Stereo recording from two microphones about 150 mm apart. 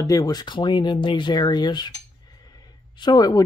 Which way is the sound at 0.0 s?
25° left (ahead or behind).